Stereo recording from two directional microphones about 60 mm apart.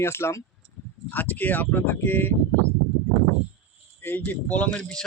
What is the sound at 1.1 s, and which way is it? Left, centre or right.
A man's voice, left.